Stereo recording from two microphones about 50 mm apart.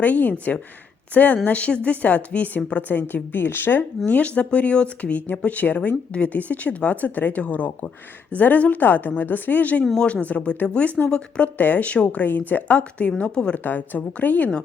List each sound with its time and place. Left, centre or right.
0.0 s a woman's voice: left
3.3 s a woman's voice: left
12.2 s a woman's voice: left
13.7 s speech: left